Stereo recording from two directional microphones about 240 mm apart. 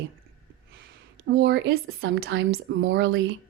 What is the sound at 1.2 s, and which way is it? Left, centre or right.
Speech, right.